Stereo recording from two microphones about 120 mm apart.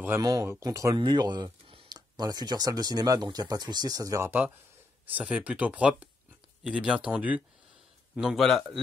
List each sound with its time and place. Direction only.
0.2 s a man's voice: 30° right (ahead or behind); by 8.7 s centre (ahead or behind)